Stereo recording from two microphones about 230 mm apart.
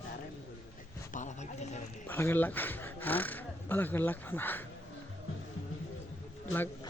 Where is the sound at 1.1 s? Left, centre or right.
Left.